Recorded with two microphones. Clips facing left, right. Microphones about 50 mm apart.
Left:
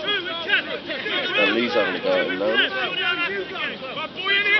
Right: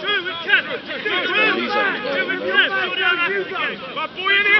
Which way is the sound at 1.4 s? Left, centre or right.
Centre.